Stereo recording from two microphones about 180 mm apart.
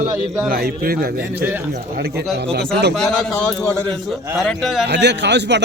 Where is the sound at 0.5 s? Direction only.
55° right (ahead or behind).